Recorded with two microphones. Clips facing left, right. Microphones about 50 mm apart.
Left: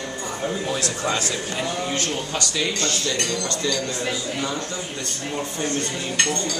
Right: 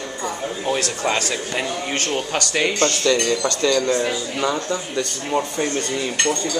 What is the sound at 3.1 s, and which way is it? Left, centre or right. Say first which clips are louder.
Speech: right 6 dB; right.